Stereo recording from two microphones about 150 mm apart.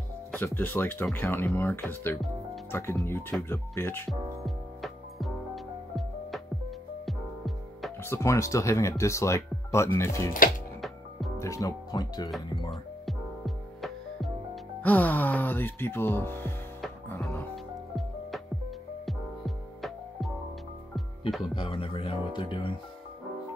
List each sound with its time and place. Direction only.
0.3 s speech: 10° left (ahead or behind)
4.1 s music: centre (ahead or behind)
8.0 s speech: 20° left (ahead or behind)
10.8 s music: centre (ahead or behind)
11.3 s speech: 20° left (ahead or behind)
13.7 s music: centre (ahead or behind)
14.8 s speech: 10° left (ahead or behind)
19.0 s music: centre (ahead or behind)
21.5 s speech: 35° left (ahead or behind)